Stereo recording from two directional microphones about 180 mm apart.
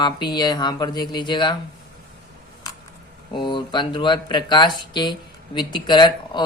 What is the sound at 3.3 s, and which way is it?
Speech, 25° left (ahead or behind).